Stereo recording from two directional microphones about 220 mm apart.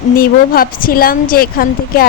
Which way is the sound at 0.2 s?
40° left (ahead or behind).